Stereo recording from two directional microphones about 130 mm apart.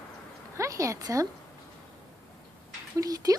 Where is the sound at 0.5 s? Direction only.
25° right (ahead or behind).